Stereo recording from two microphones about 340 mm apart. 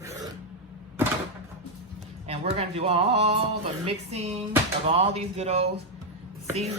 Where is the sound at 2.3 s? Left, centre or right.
Centre.